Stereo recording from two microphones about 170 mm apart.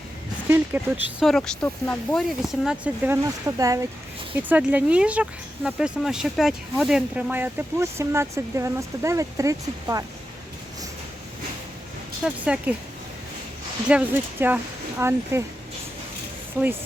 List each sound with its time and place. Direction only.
0.4 s speech: 10° right (ahead or behind)
1.2 s speech: 5° left (ahead or behind)
2.4 s speech: 5° right (ahead or behind)
3.2 s speech: 20° right (ahead or behind)
4.4 s speech: 10° right (ahead or behind)
12.2 s speech: 5° right (ahead or behind)
13.8 s speech: 10° right (ahead or behind)
16.6 s speech: 20° right (ahead or behind)